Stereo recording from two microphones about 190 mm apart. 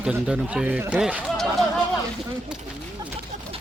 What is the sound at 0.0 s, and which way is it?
A man's voice, 5° right (ahead or behind).